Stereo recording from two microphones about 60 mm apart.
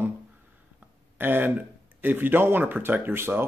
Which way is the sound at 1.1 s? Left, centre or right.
Right.